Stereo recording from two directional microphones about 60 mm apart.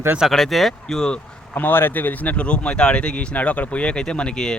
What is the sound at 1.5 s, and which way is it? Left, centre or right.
Speech, left.